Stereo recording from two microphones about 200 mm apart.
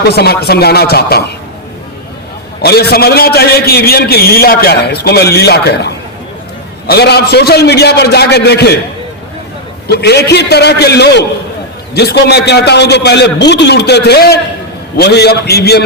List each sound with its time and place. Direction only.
0.0 s a man's voice: 50° left (ahead or behind)
2.6 s a man's voice: 50° left (ahead or behind)
9.8 s a man's voice: 55° left (ahead or behind)